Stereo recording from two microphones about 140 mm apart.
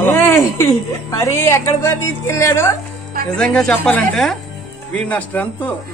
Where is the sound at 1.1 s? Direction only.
20° left (ahead or behind).